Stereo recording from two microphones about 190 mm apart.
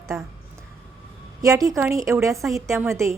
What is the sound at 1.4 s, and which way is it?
A woman's voice, 20° right (ahead or behind).